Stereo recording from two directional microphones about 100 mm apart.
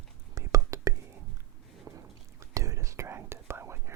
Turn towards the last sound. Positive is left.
turn(degrees=-25)  # may be behind; listen again after turning